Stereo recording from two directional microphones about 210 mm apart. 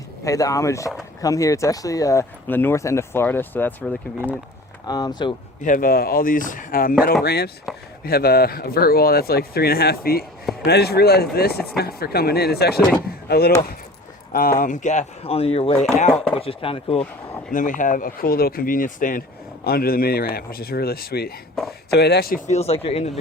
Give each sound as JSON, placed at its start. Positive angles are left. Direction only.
{"t": 0.3, "sound": "speech", "side_deg": 15}
{"t": 4.9, "sound": "speech", "side_deg": 20}
{"t": 5.6, "sound": "speech", "side_deg": 40}
{"t": 14.6, "sound": "speech", "side_deg": 35}
{"t": 17.5, "sound": "speech", "side_deg": 40}
{"t": 21.6, "sound": "speech", "side_deg": 0}
{"t": 21.9, "sound": "speech", "side_deg": 50}
{"t": 22.4, "sound": "speech", "side_deg": 30}